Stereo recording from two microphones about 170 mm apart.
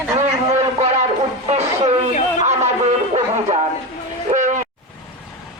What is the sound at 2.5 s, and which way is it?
Music, 40° right (ahead or behind).